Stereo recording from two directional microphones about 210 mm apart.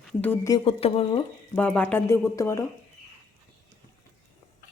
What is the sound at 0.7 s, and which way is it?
Speech, 30° left (ahead or behind).